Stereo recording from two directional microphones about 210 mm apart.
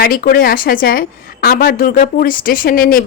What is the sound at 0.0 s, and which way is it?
A woman's voice, 45° left (ahead or behind).